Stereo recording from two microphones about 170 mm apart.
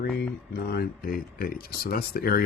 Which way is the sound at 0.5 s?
70° left (ahead or behind).